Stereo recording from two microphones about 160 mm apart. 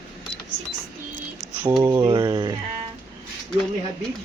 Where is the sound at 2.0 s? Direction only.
30° right (ahead or behind).